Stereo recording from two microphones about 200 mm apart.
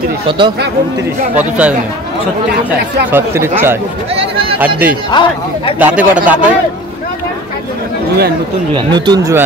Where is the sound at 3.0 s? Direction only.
10° right (ahead or behind).